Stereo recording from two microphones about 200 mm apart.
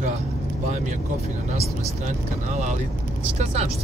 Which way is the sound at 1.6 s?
35° right (ahead or behind).